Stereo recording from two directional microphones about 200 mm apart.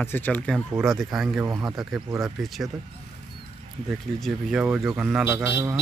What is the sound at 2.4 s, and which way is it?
Speech, centre (ahead or behind).